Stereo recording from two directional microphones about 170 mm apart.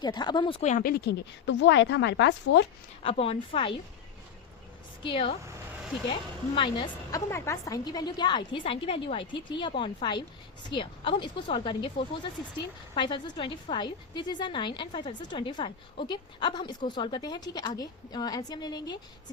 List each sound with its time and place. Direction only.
0.0 s speech: 25° left (ahead or behind)
0.6 s a woman's voice: 50° left (ahead or behind); by 2.6 s 90° left
3.0 s a woman's voice: 35° left (ahead or behind)
5.0 s a woman's voice: 30° left (ahead or behind)
7.1 s speech: 15° left (ahead or behind)